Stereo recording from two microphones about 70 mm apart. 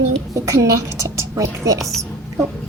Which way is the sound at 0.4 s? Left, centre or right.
Right.